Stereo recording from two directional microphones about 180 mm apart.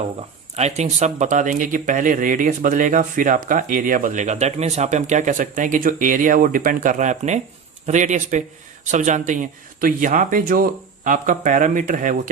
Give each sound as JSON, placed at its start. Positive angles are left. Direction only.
{"t": 0.2, "sound": "speech", "side_deg": -35}